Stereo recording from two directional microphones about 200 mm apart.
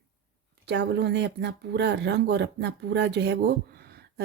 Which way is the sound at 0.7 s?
60° right (ahead or behind).